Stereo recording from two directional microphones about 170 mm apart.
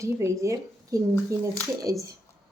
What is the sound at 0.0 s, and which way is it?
A woman's voice, 15° right (ahead or behind).